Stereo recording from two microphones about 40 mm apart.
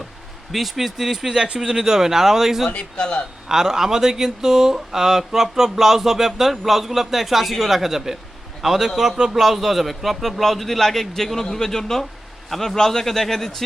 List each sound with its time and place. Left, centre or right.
0.5 s speech: centre
2.6 s a man's voice: left
3.5 s a man's voice: centre